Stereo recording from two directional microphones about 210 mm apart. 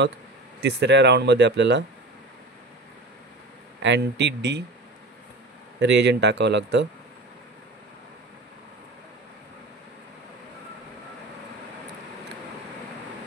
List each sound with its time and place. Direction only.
0.6 s speech: 55° right (ahead or behind)
3.8 s speech: 55° right (ahead or behind)
5.8 s speech: 55° right (ahead or behind)